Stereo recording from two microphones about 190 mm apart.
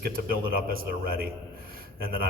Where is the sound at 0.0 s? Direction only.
50° right (ahead or behind).